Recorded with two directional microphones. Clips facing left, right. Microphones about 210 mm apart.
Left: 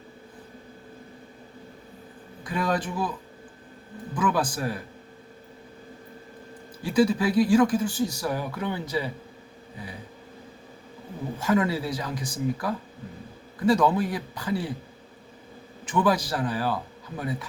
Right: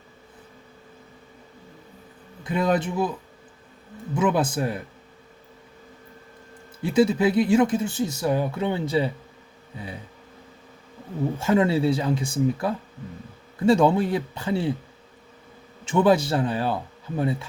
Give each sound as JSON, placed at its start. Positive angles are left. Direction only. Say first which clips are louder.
{"t": 2.4, "sound": "speech", "louder": "right 4 dB", "side_deg": -25}
{"t": 4.1, "sound": "speech", "louder": "right 4 dB", "side_deg": -25}
{"t": 6.8, "sound": "speech", "louder": "right 3 dB", "side_deg": -25}
{"t": 11.3, "sound": "speech", "louder": "right 3 dB", "side_deg": -25}
{"t": 15.8, "sound": "speech", "louder": "right 5 dB", "side_deg": -25}